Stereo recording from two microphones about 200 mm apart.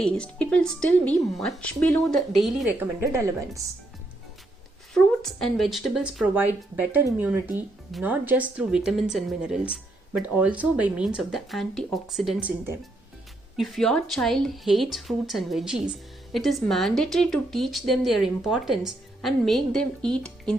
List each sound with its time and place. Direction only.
0.0 s a woman's voice: 5° left (ahead or behind)
3.0 s a woman's voice: 15° right (ahead or behind)
4.9 s a woman's voice: centre (ahead or behind)